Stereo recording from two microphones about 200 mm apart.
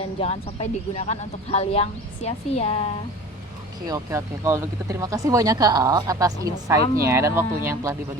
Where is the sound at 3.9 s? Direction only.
15° right (ahead or behind).